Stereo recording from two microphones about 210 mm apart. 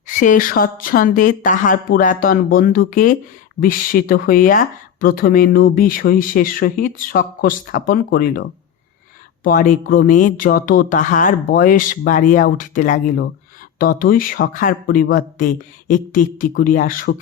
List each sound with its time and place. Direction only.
0.2 s speech: 40° left (ahead or behind)